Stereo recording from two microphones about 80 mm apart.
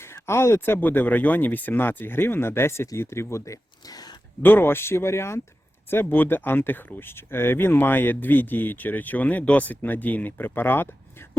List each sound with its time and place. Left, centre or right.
0.3 s speech: left
4.4 s speech: left